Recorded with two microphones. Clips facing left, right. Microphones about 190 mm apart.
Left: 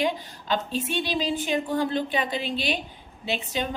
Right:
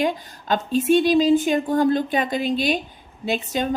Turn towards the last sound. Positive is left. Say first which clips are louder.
# right 6 dB
turn(degrees=-45)  # may be behind; listen again after turning